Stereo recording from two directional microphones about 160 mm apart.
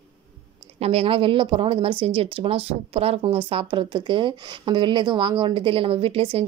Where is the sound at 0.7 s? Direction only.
40° right (ahead or behind).